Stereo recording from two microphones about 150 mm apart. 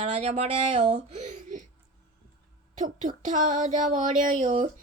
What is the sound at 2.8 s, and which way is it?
Child singing, 55° right (ahead or behind).